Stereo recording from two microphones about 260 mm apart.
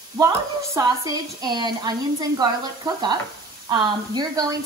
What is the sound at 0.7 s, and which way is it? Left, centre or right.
Speech, centre.